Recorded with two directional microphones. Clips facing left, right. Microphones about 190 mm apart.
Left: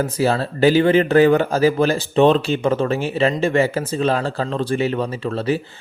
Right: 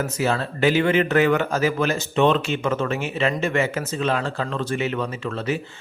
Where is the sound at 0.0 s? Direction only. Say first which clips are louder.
Left 4 dB; 35° left (ahead or behind).